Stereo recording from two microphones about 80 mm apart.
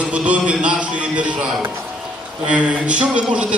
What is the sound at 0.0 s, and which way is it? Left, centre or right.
A man's voice, centre.